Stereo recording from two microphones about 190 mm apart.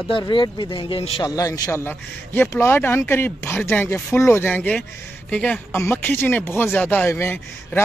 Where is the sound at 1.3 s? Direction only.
20° left (ahead or behind).